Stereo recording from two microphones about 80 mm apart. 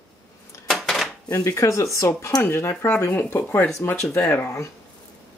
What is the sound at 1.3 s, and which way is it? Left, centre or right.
Speech, left.